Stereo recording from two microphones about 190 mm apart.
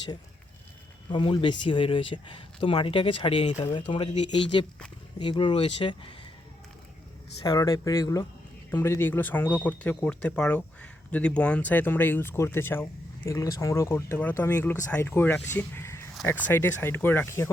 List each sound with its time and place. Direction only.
1.1 s speech: 25° left (ahead or behind)
7.4 s speech: 20° left (ahead or behind)